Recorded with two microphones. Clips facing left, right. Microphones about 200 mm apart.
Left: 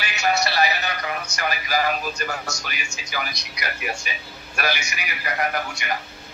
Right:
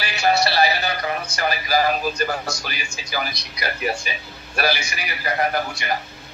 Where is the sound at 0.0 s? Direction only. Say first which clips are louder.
Right 3 dB; 30° right (ahead or behind).